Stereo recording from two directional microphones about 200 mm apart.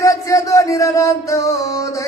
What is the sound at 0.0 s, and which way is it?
Music, 15° left (ahead or behind).